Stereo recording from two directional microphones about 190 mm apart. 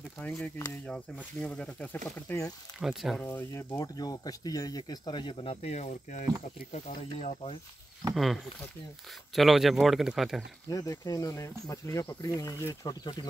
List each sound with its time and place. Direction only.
0.2 s speech: 5° left (ahead or behind)
2.8 s speech: centre (ahead or behind)
3.3 s speech: 15° left (ahead or behind); by 7.5 s 35° left (ahead or behind)
8.1 s speech: centre (ahead or behind)
10.7 s speech: 20° left (ahead or behind)